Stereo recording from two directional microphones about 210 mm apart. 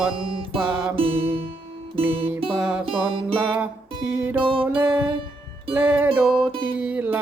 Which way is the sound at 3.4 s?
5° right (ahead or behind).